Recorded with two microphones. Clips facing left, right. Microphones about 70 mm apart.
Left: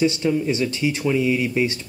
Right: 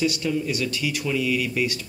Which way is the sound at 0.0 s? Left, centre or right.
Left.